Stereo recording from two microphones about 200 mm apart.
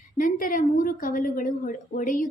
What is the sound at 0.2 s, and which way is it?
A woman's voice, 45° left (ahead or behind).